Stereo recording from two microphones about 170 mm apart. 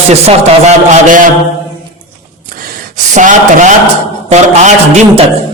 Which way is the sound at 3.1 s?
50° right (ahead or behind).